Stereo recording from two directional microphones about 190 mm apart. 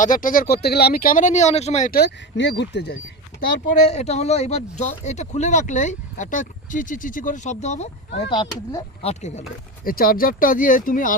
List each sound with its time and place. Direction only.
0.0 s speech: 45° left (ahead or behind); by 3.0 s 60° left (ahead or behind)
3.7 s speech: 35° left (ahead or behind)
8.3 s speech: 25° left (ahead or behind)
9.8 s speech: 50° left (ahead or behind)